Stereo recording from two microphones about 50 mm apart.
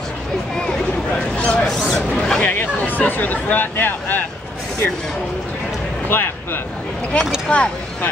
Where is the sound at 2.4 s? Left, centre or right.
Left.